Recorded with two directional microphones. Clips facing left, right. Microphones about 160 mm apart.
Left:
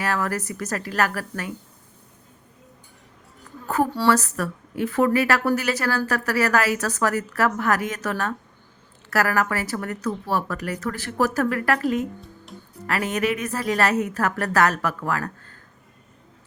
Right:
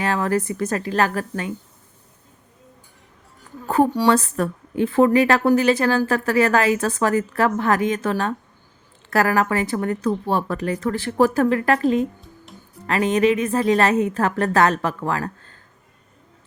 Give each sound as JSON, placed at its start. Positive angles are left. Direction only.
{"t": 0.0, "sound": "a woman's voice", "side_deg": -20}
{"t": 3.7, "sound": "a woman's voice", "side_deg": -25}